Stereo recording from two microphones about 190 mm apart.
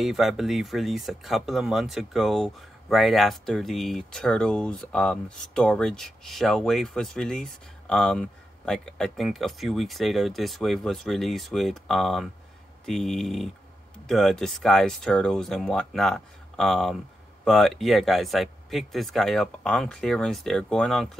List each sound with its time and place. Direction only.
0.0 s speech: centre (ahead or behind)